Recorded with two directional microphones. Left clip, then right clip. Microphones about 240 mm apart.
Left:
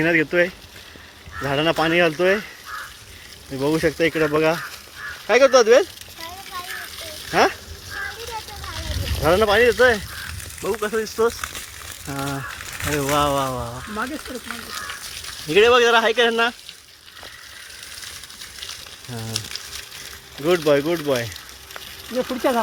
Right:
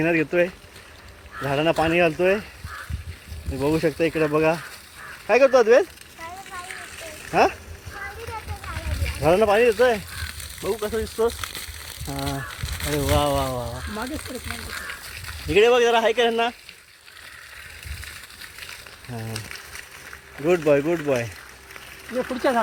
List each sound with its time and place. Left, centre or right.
0.0 s speech: centre
3.6 s speech: centre
7.3 s speech: centre
9.2 s speech: centre
10.6 s speech: centre
13.7 s speech: centre
15.4 s speech: centre
19.1 s speech: centre
20.4 s speech: centre
22.2 s speech: left